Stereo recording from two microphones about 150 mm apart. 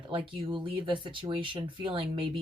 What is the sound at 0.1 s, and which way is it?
Speech, 35° right (ahead or behind).